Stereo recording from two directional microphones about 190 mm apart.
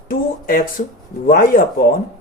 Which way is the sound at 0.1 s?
50° left (ahead or behind).